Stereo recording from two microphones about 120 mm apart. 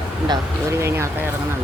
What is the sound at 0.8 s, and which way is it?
Speech, 20° right (ahead or behind).